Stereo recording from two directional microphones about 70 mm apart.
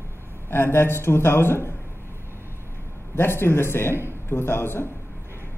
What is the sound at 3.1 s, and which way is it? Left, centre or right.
A man's voice, left.